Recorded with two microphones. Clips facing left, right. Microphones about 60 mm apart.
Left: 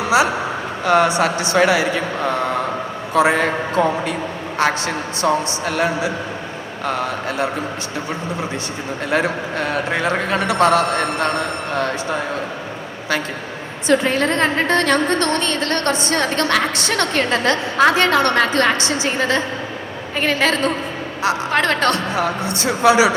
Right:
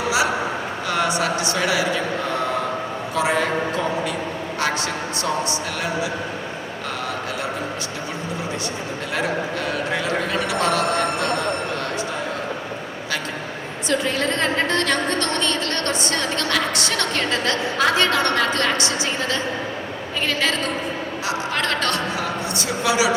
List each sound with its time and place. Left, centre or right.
0.9 s a woman's voice: left
3.2 s a woman's voice: left
5.2 s a woman's voice: left
9.1 s a woman's voice: left
13.9 s a woman's voice: left